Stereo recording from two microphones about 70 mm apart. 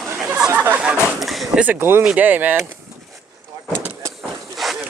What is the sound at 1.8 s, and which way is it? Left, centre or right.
Speech, right.